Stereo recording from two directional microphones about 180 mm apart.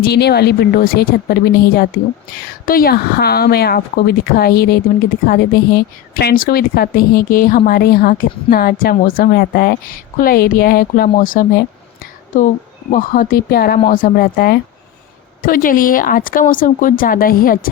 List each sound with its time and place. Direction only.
0.0 s a woman's voice: 65° left (ahead or behind); by 11.6 s 50° left (ahead or behind)
12.9 s a woman's voice: 45° left (ahead or behind)